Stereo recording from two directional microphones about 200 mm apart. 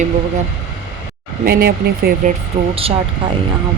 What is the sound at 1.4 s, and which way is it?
Speech, 50° right (ahead or behind).